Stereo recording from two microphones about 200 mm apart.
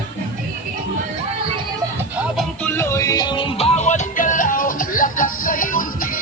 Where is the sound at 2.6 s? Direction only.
15° left (ahead or behind).